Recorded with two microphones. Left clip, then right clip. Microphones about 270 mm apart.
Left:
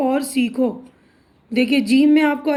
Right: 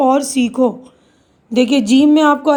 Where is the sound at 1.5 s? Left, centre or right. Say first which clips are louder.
Right 4 dB; right.